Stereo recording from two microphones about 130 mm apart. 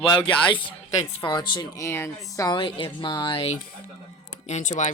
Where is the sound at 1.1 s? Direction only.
40° left (ahead or behind).